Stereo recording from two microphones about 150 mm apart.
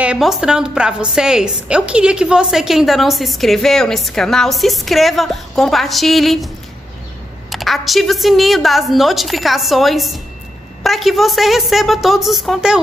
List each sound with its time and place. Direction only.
0.0 s a woman's voice: 5° right (ahead or behind)